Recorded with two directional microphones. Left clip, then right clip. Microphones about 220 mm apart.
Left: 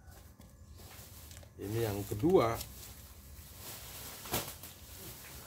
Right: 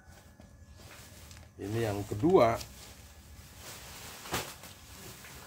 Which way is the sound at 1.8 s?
20° right (ahead or behind).